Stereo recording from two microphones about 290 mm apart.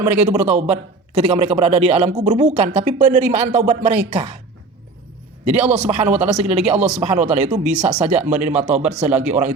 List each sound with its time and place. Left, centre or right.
0.1 s a man's voice: right
5.7 s a man's voice: right
7.6 s speech: centre
8.0 s a man's voice: right